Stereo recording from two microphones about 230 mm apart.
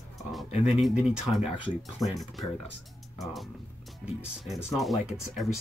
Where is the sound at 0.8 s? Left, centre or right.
Centre.